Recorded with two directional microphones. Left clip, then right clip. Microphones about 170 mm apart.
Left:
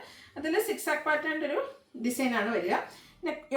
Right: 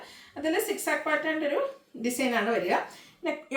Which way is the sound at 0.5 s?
20° right (ahead or behind).